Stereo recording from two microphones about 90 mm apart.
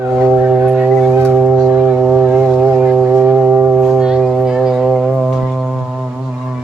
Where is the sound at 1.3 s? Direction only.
15° right (ahead or behind).